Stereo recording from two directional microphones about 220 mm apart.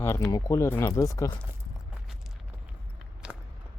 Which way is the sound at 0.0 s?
15° left (ahead or behind).